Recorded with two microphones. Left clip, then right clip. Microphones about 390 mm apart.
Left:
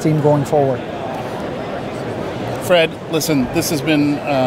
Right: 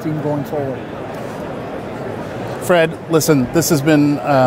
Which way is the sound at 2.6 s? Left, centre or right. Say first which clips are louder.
Even; right.